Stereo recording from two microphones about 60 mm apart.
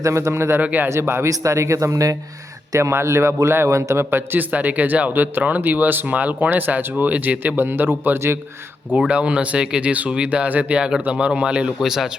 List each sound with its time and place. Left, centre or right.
0.0 s speech: right
0.6 s speech: right
0.9 s speech: right
1.3 s speech: right
2.7 s speech: right
9.0 s speech: centre